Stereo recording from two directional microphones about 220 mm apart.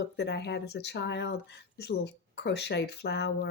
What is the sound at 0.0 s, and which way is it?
Speech, 50° left (ahead or behind).